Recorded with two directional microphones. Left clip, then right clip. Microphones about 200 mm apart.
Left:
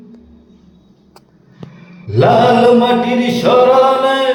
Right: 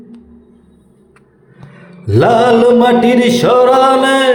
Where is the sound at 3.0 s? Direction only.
40° right (ahead or behind).